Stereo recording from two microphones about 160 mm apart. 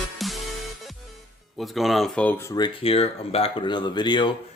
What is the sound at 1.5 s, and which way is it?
Speech, centre (ahead or behind).